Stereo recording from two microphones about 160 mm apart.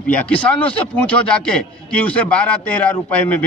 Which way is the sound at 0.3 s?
10° left (ahead or behind).